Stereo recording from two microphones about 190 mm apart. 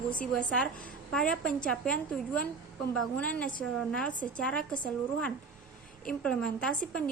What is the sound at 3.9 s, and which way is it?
Speech, 5° left (ahead or behind).